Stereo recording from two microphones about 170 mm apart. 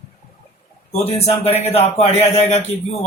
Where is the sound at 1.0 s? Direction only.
35° left (ahead or behind).